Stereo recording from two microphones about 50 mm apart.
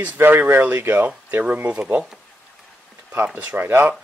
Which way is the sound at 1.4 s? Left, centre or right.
Right.